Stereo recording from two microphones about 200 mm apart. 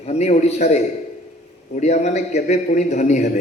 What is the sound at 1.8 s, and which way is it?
A man's voice, 35° left (ahead or behind).